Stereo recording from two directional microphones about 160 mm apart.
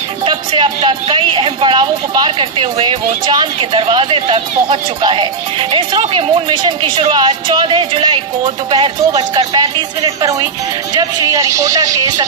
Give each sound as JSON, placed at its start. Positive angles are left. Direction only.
{"t": 0.2, "sound": "speech", "side_deg": -30}